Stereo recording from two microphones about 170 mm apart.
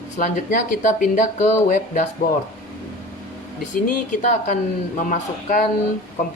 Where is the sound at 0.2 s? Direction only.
50° left (ahead or behind).